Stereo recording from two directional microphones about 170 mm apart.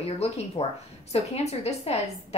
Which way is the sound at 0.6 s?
35° left (ahead or behind).